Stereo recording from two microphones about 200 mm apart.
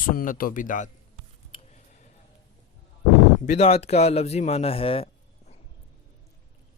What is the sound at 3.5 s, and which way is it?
Speech, 30° left (ahead or behind).